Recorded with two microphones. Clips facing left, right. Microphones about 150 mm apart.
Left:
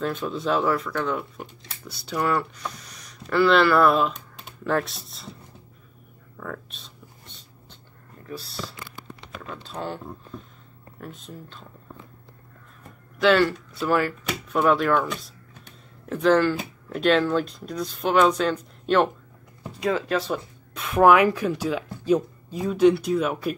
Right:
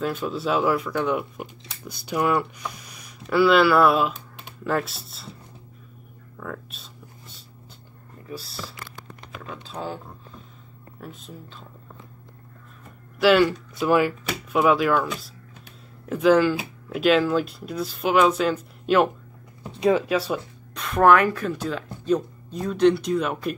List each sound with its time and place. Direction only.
0.0 s speech: 5° right (ahead or behind)
6.4 s a sound: 5° right (ahead or behind)
8.3 s speech: 5° right (ahead or behind)
13.2 s speech: 10° right (ahead or behind)
14.2 s speech: 5° right (ahead or behind)
19.7 s speech: 20° right (ahead or behind)
20.7 s speech: 5° left (ahead or behind)